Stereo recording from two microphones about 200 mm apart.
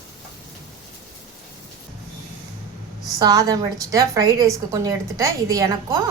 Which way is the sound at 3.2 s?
20° right (ahead or behind).